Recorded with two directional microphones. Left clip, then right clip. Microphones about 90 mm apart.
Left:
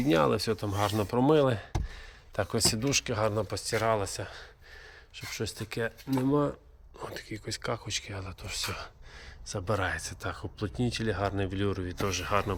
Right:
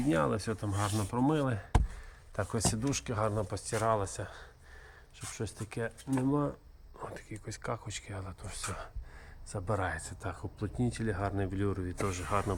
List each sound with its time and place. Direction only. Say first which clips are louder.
0.1 s speech: left 6 dB; 15° left (ahead or behind)
2.3 s speech: left 5 dB; centre (ahead or behind)